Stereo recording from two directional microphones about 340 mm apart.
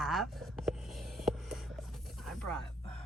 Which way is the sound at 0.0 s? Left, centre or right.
Centre.